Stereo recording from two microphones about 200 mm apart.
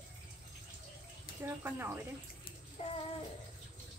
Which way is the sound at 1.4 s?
10° right (ahead or behind).